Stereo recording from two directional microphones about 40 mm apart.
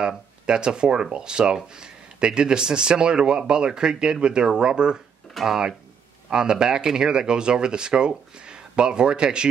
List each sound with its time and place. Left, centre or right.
0.5 s speech: right
5.3 s speech: centre
6.3 s speech: centre